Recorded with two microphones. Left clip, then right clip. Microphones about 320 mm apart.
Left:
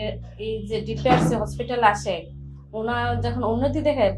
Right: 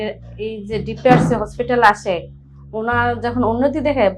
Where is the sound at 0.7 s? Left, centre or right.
Right.